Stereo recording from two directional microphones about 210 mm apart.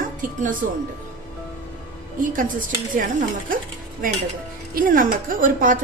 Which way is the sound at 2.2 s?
40° right (ahead or behind).